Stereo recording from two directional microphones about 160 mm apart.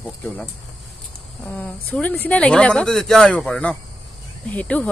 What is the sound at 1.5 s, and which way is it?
Speech, 10° left (ahead or behind).